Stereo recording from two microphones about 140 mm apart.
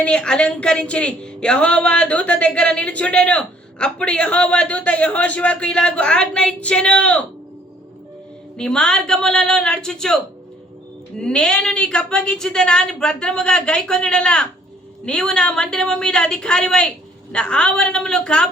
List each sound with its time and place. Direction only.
0.0 s a woman's voice: 5° left (ahead or behind)
8.5 s a woman's voice: 5° left (ahead or behind)
11.2 s a woman's voice: 5° left (ahead or behind)